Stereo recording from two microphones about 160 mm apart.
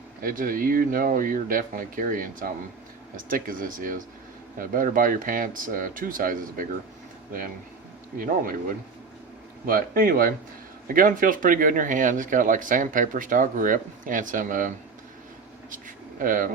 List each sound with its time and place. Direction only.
0.2 s speech: 60° right (ahead or behind)
8.2 s speech: 60° right (ahead or behind)
15.7 s speech: 60° right (ahead or behind)